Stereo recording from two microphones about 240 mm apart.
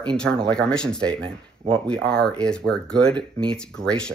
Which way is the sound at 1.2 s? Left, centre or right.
Right.